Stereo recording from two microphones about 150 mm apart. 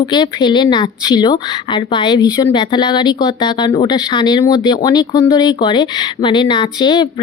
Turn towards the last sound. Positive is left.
turn(degrees=30)  # may be behind; listen again after turning